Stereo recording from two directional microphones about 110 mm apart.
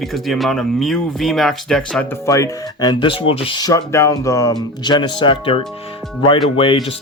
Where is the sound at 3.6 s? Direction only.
30° left (ahead or behind).